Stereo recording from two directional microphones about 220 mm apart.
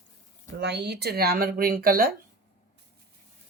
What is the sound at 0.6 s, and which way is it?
Speech, 50° right (ahead or behind).